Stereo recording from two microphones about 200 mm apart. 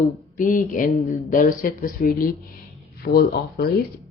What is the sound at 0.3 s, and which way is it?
Speech, 40° left (ahead or behind).